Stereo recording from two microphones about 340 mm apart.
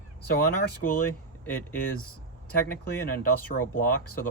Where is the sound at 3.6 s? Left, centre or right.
Left.